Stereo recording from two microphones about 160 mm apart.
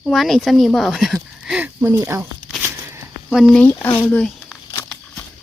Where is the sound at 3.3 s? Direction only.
Centre (ahead or behind).